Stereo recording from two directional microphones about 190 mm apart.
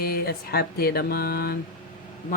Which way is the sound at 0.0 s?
55° left (ahead or behind).